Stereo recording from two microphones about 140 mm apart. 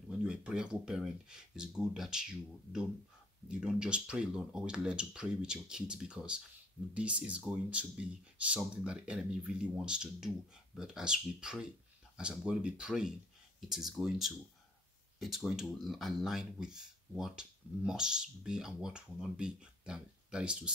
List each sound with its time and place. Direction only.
0.2 s speech: 5° right (ahead or behind)